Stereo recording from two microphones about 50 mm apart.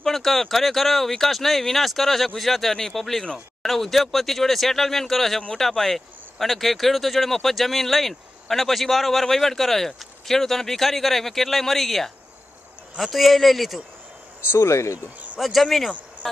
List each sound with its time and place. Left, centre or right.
0.0 s speech: centre
14.5 s speech: left
15.3 s speech: centre